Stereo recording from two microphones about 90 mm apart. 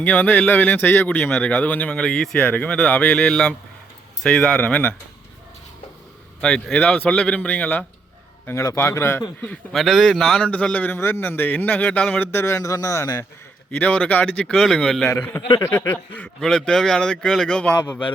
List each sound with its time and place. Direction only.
0.0 s speech: 20° left (ahead or behind)
6.4 s speech: 10° left (ahead or behind)
8.6 s a man's voice: 30° left (ahead or behind)
9.7 s speech: centre (ahead or behind)
10.4 s a man's voice: 15° left (ahead or behind); by 13.2 s 40° left (ahead or behind)
13.7 s speech: 15° left (ahead or behind)
14.5 s speech: 5° left (ahead or behind)
15.4 s speech: 55° left (ahead or behind)
15.6 s a man's voice: 30° left (ahead or behind)
16.1 s speech: 10° left (ahead or behind)